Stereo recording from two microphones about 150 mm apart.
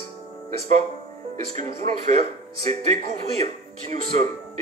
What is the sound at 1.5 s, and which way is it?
Speech, 50° right (ahead or behind).